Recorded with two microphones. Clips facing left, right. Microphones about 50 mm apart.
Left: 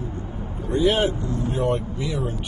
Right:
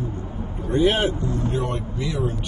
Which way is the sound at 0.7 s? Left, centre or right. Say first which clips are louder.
Even; right.